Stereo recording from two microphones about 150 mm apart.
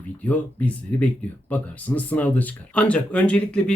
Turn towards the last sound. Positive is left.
turn(degrees=5)  # may be behind; listen again after turning